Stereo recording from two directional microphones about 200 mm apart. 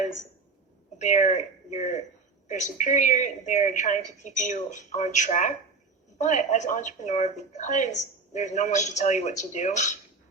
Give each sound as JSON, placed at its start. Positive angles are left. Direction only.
{"t": 0.9, "sound": "speech", "side_deg": 35}